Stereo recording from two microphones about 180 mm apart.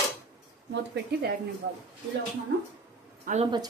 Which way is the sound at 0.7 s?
75° right (ahead or behind).